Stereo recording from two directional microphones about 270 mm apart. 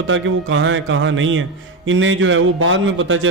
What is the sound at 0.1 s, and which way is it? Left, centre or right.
A man's voice, right.